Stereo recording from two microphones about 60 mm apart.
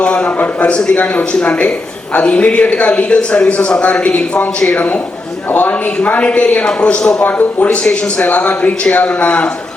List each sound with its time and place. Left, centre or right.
0.0 s speech: left
7.2 s speech: left